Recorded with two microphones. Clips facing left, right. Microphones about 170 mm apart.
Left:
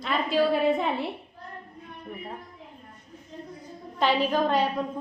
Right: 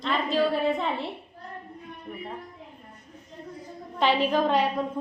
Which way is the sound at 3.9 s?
5° left (ahead or behind).